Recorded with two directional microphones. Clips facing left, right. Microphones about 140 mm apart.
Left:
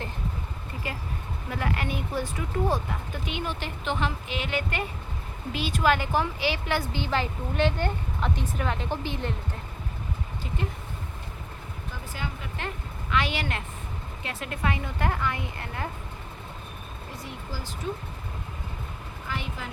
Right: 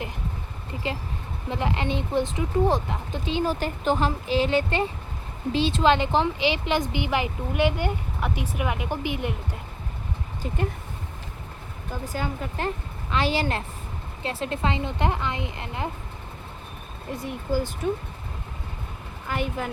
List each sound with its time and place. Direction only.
1.5 s a woman's voice: 20° right (ahead or behind)
12.1 s a woman's voice: 40° right (ahead or behind); by 15.9 s 20° right (ahead or behind)
17.5 s speech: 60° right (ahead or behind)
19.3 s speech: 50° right (ahead or behind)